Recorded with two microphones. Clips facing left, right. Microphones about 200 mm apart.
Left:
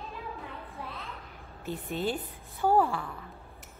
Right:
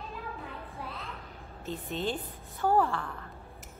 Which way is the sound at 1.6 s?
10° left (ahead or behind).